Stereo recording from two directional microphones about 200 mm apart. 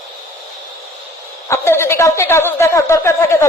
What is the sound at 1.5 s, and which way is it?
A woman's voice, 15° left (ahead or behind).